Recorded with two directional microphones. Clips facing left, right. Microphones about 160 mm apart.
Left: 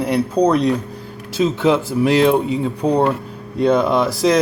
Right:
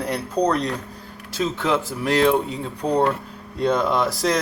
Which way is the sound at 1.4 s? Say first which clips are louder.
Left 6 dB; 25° left (ahead or behind).